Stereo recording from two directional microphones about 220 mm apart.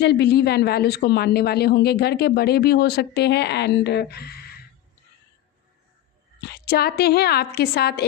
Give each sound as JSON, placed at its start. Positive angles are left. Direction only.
{"t": 0.0, "sound": "speech", "side_deg": 50}
{"t": 6.5, "sound": "speech", "side_deg": 45}